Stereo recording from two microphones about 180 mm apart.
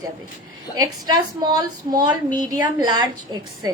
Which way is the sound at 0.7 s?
20° right (ahead or behind).